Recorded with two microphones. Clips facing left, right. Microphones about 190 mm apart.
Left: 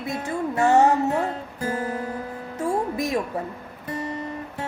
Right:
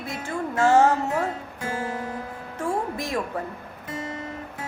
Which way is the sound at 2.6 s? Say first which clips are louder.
Left 3 dB; 20° left (ahead or behind).